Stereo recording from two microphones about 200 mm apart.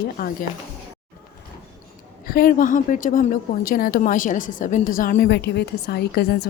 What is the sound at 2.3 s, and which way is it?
A woman's voice, 45° left (ahead or behind).